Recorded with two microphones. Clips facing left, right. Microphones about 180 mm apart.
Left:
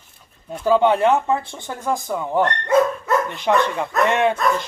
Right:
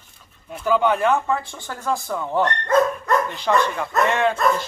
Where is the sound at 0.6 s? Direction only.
30° left (ahead or behind).